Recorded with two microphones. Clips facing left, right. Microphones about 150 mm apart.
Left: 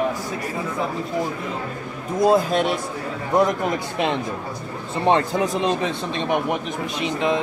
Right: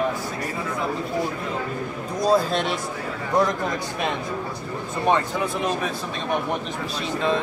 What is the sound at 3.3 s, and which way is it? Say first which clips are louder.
Speech: left 3 dB; 20° left (ahead or behind).